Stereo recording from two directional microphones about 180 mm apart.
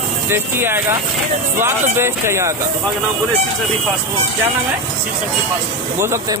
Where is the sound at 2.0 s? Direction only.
15° right (ahead or behind).